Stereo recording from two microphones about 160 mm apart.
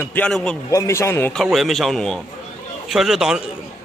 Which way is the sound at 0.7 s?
20° left (ahead or behind).